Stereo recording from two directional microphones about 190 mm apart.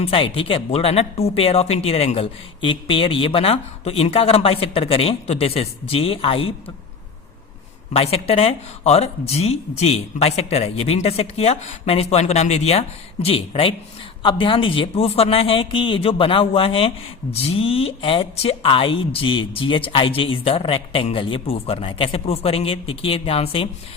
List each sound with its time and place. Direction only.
0.0 s speech: 30° left (ahead or behind)
7.9 s speech: 30° left (ahead or behind)